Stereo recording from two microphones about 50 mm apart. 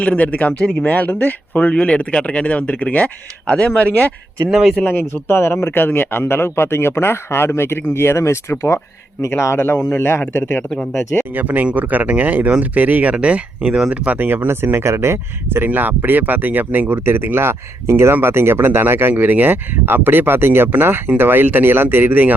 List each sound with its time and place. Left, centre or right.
0.0 s speech: left
5.3 s speech: left
5.7 s speech: left
10.9 s speech: left
11.3 s speech: right
14.4 s speech: right